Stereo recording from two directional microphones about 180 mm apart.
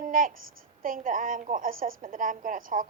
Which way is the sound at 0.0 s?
50° right (ahead or behind).